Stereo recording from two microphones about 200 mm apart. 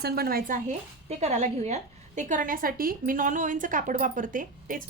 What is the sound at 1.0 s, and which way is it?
A woman's voice, 35° right (ahead or behind).